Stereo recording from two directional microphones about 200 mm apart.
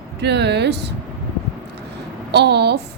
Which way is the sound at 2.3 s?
55° right (ahead or behind).